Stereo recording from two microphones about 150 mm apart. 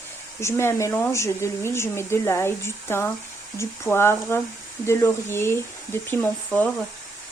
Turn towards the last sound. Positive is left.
turn(degrees=10)  # may be behind; listen again after turning